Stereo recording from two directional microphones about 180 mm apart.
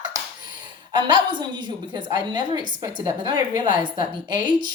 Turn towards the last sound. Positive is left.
turn(degrees=-25)  # may be behind; listen again after turning